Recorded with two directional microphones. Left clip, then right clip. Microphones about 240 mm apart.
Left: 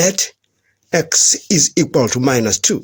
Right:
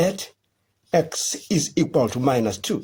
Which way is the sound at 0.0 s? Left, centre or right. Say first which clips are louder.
Left 6 dB; left.